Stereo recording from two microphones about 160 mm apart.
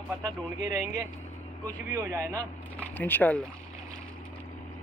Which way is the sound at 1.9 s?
15° right (ahead or behind).